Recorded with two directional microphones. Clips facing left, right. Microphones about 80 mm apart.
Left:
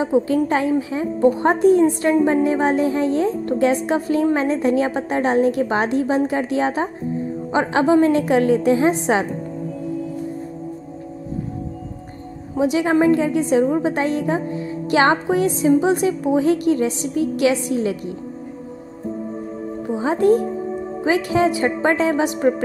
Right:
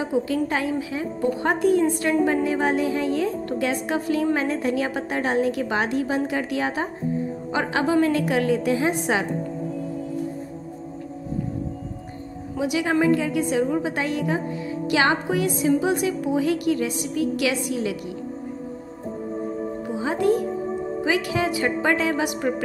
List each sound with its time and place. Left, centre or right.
0.0 s a woman's voice: left
12.5 s a woman's voice: left
20.0 s a woman's voice: left